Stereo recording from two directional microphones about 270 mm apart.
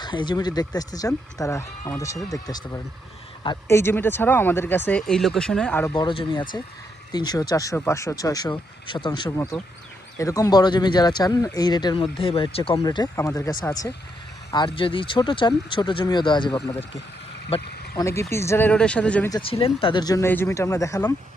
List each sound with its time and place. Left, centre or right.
0.0 s speech: centre
5.9 s speech: centre
17.9 s speech: centre
19.5 s speech: left